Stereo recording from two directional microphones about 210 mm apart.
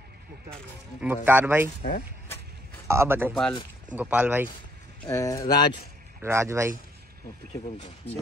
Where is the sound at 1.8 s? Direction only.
35° left (ahead or behind).